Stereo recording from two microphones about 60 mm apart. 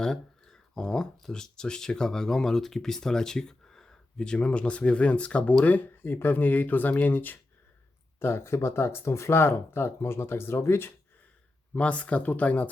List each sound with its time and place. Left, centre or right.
0.0 s speech: centre; by 7.3 s left
8.2 s speech: left
11.7 s speech: left